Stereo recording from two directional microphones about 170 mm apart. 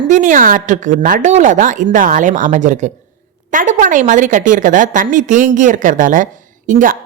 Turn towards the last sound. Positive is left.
turn(degrees=-50)  # may be behind; listen again after turning